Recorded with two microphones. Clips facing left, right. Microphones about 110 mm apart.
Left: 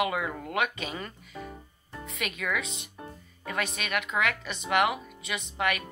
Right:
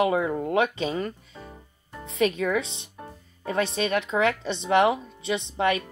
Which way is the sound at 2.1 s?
30° right (ahead or behind).